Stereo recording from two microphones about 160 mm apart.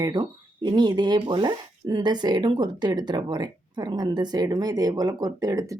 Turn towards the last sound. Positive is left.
turn(degrees=-20)  # may be behind; listen again after turning